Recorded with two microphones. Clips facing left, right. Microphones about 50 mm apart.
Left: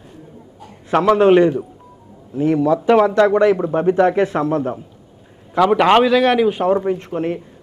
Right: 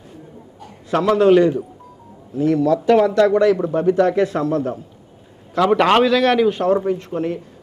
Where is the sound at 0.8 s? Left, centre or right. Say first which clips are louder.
Left 2 dB; left.